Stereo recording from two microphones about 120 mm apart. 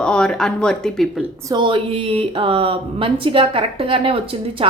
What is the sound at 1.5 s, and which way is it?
Speech, 40° right (ahead or behind).